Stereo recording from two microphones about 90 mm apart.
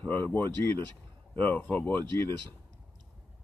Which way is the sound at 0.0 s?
20° left (ahead or behind).